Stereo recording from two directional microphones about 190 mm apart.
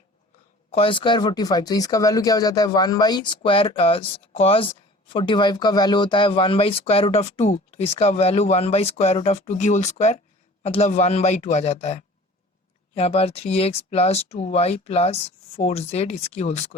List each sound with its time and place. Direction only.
0.7 s speech: 30° left (ahead or behind)